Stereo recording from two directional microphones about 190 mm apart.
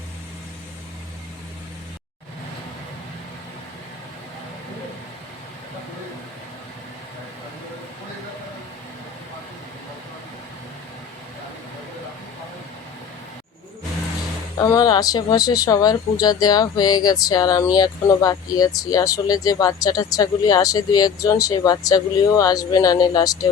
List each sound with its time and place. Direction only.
14.6 s speech: 20° left (ahead or behind)